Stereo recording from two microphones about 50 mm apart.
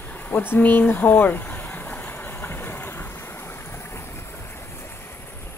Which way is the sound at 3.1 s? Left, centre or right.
Left.